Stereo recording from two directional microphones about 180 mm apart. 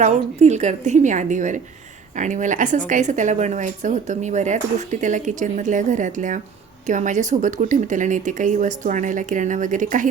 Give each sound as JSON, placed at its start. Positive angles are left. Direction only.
{"t": 0.0, "sound": "a woman's voice", "side_deg": -40}